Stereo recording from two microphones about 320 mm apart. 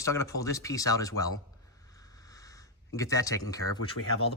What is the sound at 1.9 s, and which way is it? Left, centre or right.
Snort, centre.